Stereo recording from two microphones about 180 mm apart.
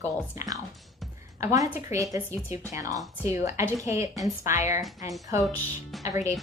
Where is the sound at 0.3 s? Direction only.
20° right (ahead or behind).